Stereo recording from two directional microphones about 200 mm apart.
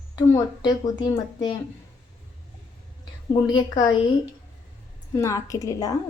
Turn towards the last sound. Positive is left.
turn(degrees=15)  # may be behind; listen again after turning